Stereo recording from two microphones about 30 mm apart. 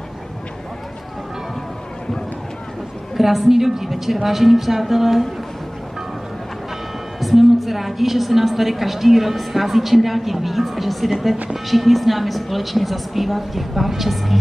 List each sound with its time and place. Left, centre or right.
3.2 s a woman's voice: centre
7.2 s a woman's voice: centre